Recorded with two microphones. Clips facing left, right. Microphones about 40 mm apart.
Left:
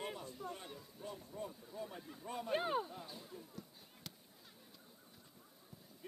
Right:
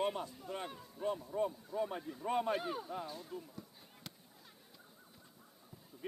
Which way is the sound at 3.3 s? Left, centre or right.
Right.